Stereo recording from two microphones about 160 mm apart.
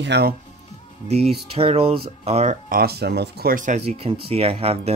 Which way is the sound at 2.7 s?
75° right (ahead or behind).